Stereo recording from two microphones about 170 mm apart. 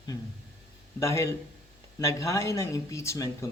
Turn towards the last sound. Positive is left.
turn(degrees=15)  # may be behind; listen again after turning